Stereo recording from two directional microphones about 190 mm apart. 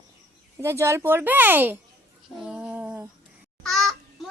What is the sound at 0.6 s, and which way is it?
Speech, 15° right (ahead or behind).